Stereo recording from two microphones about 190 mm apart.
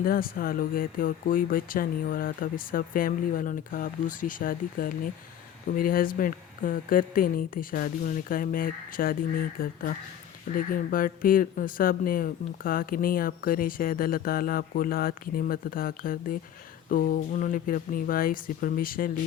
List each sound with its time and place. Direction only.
0.0 s speech: 50° left (ahead or behind)